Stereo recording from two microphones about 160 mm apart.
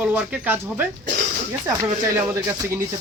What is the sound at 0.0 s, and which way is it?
Speech, 10° right (ahead or behind).